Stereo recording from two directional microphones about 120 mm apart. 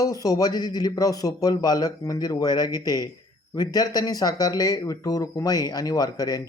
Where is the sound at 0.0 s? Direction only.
30° left (ahead or behind).